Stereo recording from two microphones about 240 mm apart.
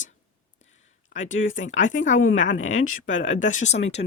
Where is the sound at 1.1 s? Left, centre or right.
Left.